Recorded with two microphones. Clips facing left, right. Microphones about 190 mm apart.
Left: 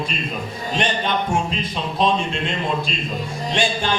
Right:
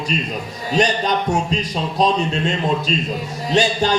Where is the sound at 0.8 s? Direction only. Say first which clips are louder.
Right 4 dB; 40° right (ahead or behind).